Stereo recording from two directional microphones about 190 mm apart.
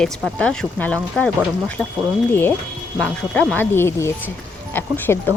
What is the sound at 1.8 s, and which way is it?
Speech, 5° right (ahead or behind).